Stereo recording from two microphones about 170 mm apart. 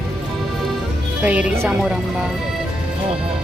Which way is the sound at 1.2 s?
10° right (ahead or behind).